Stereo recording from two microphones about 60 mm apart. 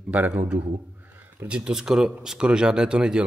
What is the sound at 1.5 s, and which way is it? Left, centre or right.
Speech, centre.